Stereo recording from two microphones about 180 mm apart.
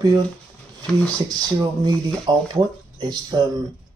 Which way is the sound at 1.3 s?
20° right (ahead or behind).